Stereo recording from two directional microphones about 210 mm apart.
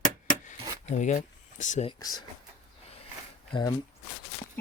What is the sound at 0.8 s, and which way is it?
Speech, 35° left (ahead or behind).